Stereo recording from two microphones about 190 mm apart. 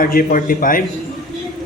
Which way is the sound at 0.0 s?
50° left (ahead or behind).